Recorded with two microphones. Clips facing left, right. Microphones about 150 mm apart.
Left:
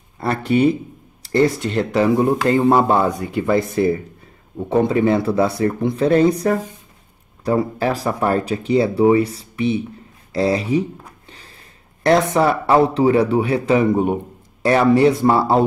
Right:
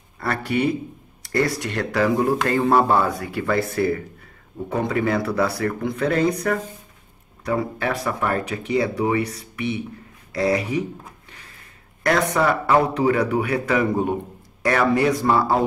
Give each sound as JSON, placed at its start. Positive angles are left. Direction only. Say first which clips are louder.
{"t": 0.2, "sound": "speech", "louder": "left 6 dB", "side_deg": 25}
{"t": 10.3, "sound": "a sound", "louder": "left 3 dB", "side_deg": 30}
{"t": 12.0, "sound": "speech", "louder": "left 5 dB", "side_deg": 25}